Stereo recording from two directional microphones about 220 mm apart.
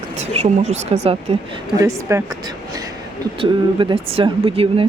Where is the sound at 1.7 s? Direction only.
15° right (ahead or behind).